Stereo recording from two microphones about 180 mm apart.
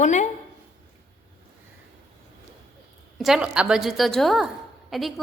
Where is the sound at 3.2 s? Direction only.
5° right (ahead or behind).